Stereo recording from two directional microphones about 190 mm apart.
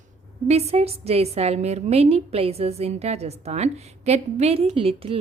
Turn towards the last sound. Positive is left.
turn(degrees=-30)  # may be behind; listen again after turning